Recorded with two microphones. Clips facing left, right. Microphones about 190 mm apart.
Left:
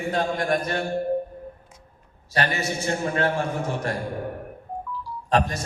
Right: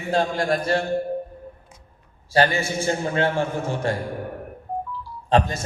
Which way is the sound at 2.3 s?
30° right (ahead or behind).